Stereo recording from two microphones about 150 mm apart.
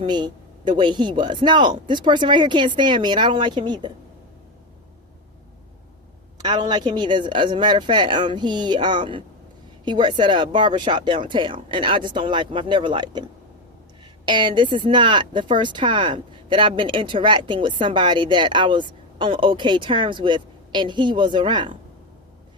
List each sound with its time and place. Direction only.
0.0 s a woman's voice: 30° right (ahead or behind)
6.4 s a woman's voice: 30° right (ahead or behind)
14.3 s a woman's voice: 30° right (ahead or behind)